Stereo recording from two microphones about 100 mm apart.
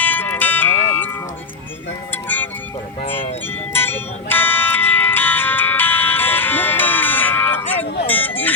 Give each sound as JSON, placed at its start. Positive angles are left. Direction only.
{"t": 0.0, "sound": "music", "side_deg": 20}
{"t": 3.7, "sound": "music", "side_deg": 20}